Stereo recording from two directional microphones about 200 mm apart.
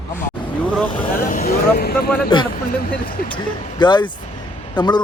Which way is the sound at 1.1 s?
45° left (ahead or behind).